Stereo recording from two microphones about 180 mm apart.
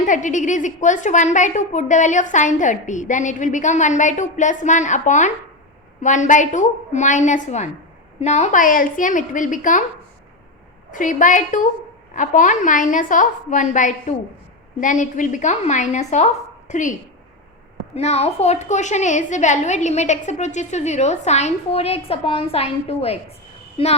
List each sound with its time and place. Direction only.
0.0 s a woman's voice: 45° left (ahead or behind)
10.9 s a woman's voice: 45° left (ahead or behind)
17.9 s a woman's voice: 35° left (ahead or behind)